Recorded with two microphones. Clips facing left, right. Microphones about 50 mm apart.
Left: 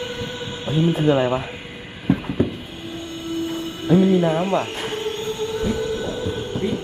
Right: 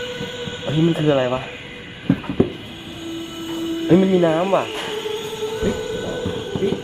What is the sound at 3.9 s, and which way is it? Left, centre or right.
Train, centre.